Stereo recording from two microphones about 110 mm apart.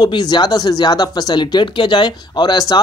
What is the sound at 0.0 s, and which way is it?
Speech, 40° left (ahead or behind).